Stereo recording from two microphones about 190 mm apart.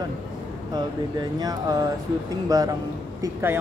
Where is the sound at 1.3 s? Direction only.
20° right (ahead or behind).